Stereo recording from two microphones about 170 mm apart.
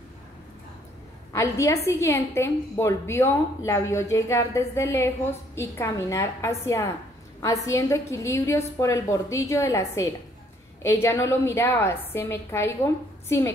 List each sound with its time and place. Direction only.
1.3 s a woman's voice: 15° left (ahead or behind)